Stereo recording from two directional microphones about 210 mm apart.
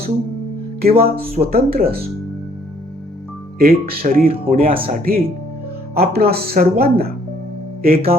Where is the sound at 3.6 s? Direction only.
45° right (ahead or behind).